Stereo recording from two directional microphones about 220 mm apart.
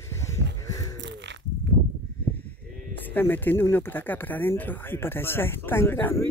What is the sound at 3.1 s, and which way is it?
Speech, 10° left (ahead or behind).